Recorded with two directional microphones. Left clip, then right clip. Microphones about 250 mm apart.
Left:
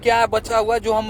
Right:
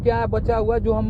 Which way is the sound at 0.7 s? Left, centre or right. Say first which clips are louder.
Left 3 dB; left.